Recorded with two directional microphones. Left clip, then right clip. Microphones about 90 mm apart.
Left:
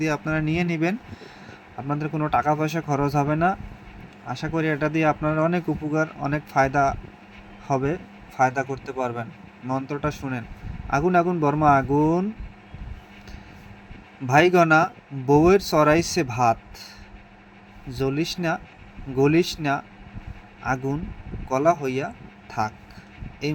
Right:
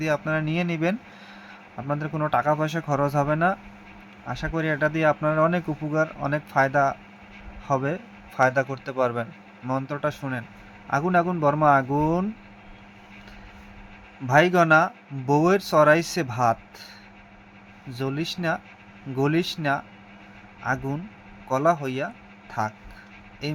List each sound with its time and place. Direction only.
0.0 s speech: 15° left (ahead or behind)
8.4 s a man's voice: 10° right (ahead or behind)
9.6 s speech: 5° left (ahead or behind)
14.3 s speech: 15° left (ahead or behind)
17.9 s speech: 15° left (ahead or behind)